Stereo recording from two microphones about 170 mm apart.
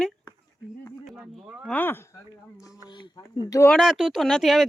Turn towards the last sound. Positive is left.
turn(degrees=0)  # may be behind; listen again after turning